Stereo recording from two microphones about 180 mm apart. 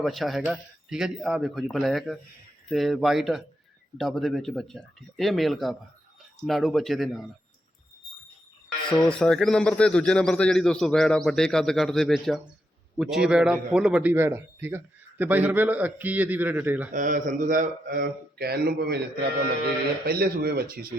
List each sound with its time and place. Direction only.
0.0 s speech: centre (ahead or behind)
9.0 s a man's voice: 5° left (ahead or behind)
16.9 s a man's voice: 45° right (ahead or behind); by 18.9 s 65° right (ahead or behind)
20.1 s speech: 60° right (ahead or behind)